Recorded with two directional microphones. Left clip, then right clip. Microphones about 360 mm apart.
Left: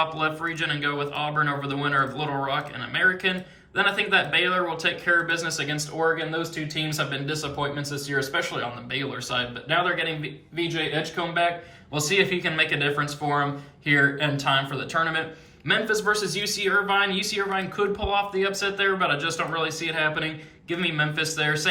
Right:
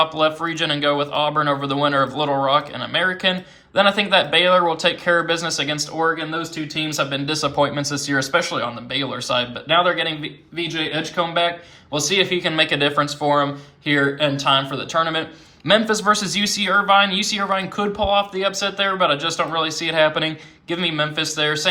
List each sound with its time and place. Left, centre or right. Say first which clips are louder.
0.0 s speech: right 7 dB; centre